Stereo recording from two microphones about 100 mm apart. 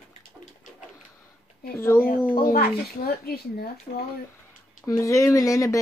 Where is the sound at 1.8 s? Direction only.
25° left (ahead or behind).